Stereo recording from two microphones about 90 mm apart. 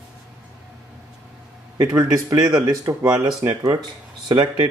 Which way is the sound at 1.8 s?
40° right (ahead or behind).